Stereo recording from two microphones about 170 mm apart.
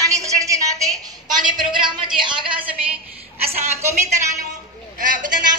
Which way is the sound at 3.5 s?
15° right (ahead or behind).